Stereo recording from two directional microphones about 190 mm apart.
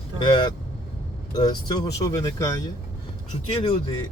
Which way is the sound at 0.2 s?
25° left (ahead or behind).